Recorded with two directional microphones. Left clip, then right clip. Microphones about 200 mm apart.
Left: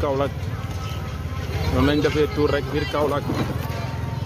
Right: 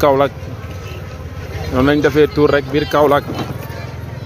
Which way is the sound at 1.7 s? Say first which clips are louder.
Right 8 dB; 25° right (ahead or behind).